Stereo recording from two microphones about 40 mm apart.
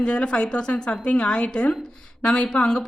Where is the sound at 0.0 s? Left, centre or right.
Left.